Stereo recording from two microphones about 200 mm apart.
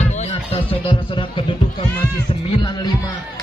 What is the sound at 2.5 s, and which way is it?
Music, 20° left (ahead or behind).